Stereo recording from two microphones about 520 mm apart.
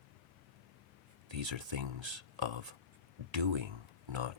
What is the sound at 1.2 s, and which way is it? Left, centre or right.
Speech, right.